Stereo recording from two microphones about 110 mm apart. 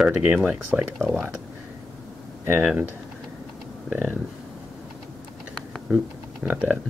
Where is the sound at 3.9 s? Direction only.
15° right (ahead or behind).